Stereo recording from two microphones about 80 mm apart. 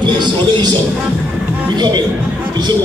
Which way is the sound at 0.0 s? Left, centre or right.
Right.